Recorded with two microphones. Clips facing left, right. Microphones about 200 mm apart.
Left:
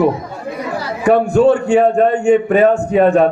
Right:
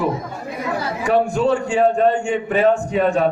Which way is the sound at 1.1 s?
60° left (ahead or behind).